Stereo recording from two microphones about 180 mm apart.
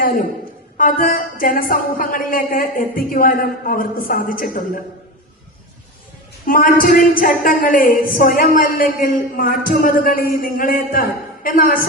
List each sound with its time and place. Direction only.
0.0 s a man's voice: 50° left (ahead or behind)
6.4 s a woman's voice: 50° left (ahead or behind)